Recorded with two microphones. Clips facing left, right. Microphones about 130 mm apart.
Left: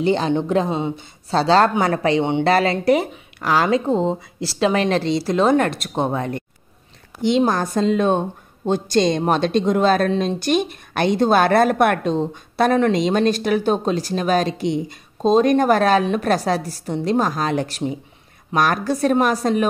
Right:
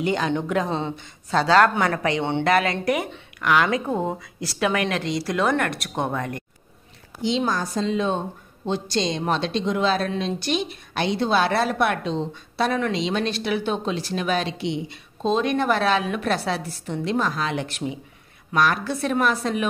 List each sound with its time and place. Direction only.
0.0 s a woman's voice: 30° left (ahead or behind)
0.7 s speech: 15° left (ahead or behind)
0.9 s a woman's voice: 30° left (ahead or behind)
7.2 s speech: 55° left (ahead or behind)